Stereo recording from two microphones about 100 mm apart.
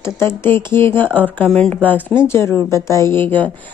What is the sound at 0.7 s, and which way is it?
A woman's voice, 25° left (ahead or behind).